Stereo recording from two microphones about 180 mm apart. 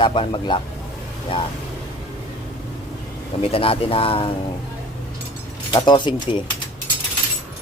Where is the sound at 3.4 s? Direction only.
30° left (ahead or behind).